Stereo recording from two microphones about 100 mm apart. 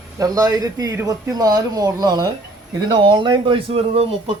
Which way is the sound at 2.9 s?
50° right (ahead or behind).